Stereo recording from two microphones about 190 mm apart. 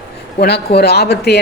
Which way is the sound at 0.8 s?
60° left (ahead or behind).